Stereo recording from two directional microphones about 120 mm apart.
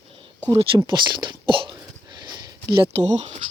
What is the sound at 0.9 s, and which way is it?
Speech, 40° right (ahead or behind).